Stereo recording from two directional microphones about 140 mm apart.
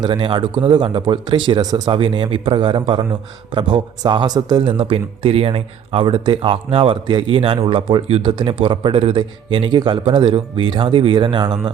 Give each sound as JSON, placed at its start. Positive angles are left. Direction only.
{"t": 0.0, "sound": "speech", "side_deg": -35}